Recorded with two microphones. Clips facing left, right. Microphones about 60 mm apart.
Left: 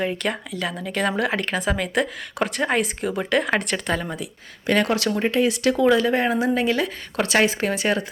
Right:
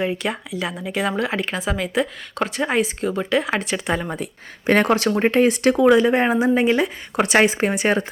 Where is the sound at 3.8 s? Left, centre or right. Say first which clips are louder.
Right 2 dB; centre.